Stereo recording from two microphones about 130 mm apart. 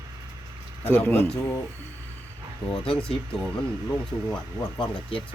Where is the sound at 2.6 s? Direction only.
45° left (ahead or behind).